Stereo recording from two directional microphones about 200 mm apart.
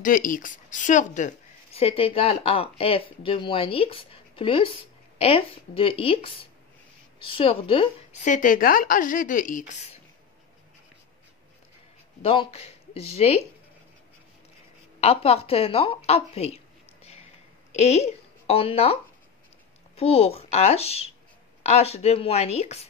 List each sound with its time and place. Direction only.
0.0 s a woman's voice: 40° left (ahead or behind)
12.2 s speech: 30° left (ahead or behind)
15.0 s speech: 30° left (ahead or behind)
20.0 s a woman's voice: 30° left (ahead or behind)